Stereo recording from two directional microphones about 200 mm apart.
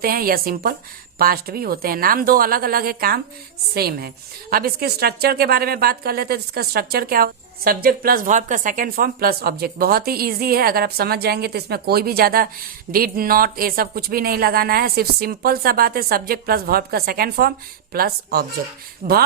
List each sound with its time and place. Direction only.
0.0 s a woman's voice: 45° right (ahead or behind)